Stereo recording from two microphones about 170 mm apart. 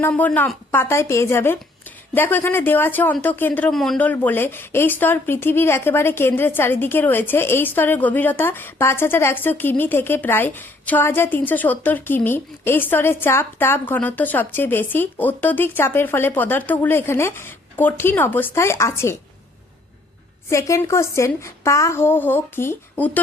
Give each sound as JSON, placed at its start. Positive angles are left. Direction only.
{"t": 0.0, "sound": "speech", "side_deg": 10}
{"t": 20.5, "sound": "speech", "side_deg": 20}